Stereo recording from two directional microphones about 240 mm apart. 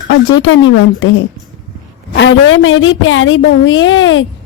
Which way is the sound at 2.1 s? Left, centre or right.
Left.